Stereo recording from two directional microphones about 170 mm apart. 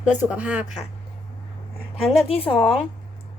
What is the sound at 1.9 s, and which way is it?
Speech, 35° left (ahead or behind).